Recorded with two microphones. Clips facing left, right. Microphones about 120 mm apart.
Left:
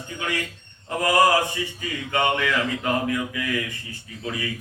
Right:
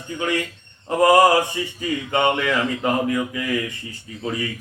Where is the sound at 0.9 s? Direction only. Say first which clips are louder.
Right 5 dB; 30° right (ahead or behind).